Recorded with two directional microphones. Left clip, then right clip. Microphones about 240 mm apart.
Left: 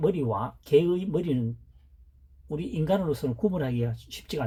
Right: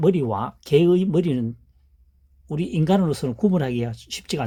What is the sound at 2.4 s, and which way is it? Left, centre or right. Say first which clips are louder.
Speech: right 5 dB; right.